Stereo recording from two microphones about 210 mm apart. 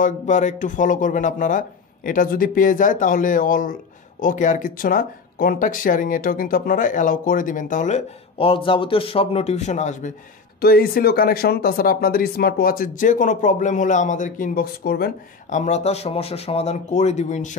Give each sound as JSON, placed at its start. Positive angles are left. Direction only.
{"t": 0.0, "sound": "speech", "side_deg": 35}